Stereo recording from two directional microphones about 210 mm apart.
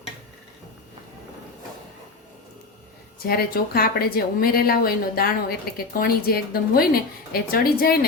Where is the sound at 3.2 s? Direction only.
45° left (ahead or behind).